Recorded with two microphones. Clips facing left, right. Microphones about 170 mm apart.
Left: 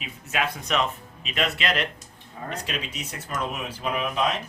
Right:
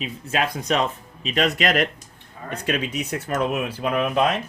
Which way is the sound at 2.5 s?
55° right (ahead or behind).